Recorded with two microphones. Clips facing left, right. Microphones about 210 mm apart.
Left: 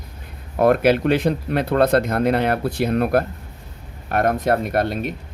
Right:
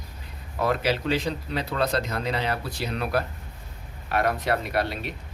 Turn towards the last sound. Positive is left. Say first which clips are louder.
# left 6 dB
turn(degrees=50)  # may be behind; listen again after turning